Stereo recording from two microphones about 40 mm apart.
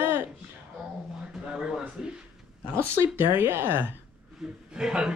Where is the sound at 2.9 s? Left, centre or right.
Right.